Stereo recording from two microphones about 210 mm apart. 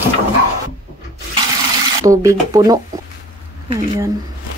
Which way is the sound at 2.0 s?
15° right (ahead or behind).